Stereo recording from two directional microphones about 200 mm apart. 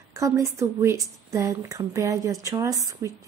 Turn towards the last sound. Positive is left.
turn(degrees=-15)  # may be behind; listen again after turning